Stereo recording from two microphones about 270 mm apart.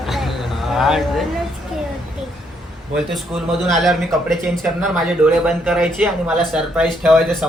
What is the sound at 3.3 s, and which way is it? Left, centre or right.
A man's voice, centre.